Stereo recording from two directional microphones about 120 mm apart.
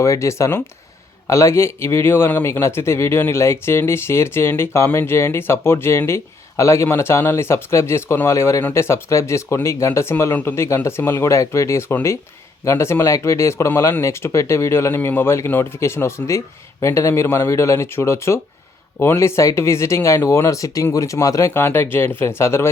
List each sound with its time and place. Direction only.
0.0 s speech: 25° left (ahead or behind)